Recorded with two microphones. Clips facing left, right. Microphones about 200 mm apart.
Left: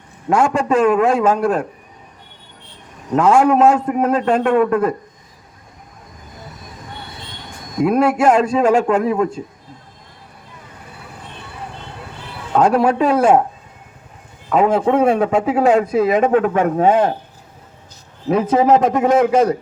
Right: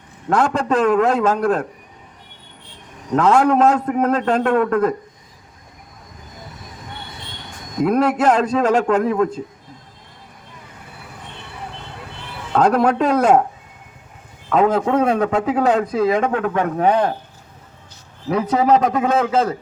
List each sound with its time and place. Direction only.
0.3 s a man's voice: 10° left (ahead or behind)
3.2 s a man's voice: 10° left (ahead or behind)
7.9 s a man's voice: 10° left (ahead or behind)
12.5 s a man's voice: 10° left (ahead or behind)
14.5 s a man's voice: 10° left (ahead or behind)
16.4 s a man's voice: 30° left (ahead or behind)
18.3 s a man's voice: 25° left (ahead or behind)